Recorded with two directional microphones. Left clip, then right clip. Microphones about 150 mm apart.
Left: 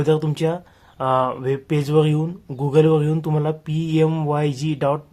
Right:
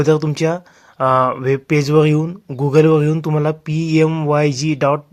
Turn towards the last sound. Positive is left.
turn(degrees=-25)  # may be behind; listen again after turning